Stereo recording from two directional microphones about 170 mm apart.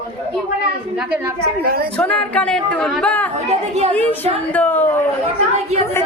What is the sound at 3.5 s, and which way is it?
Speech, 40° right (ahead or behind).